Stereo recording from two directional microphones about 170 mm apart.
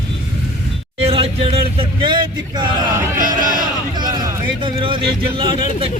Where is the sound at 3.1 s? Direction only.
55° right (ahead or behind).